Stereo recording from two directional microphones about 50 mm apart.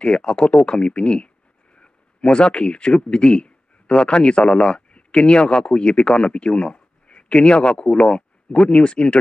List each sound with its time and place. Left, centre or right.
0.0 s a man's voice: centre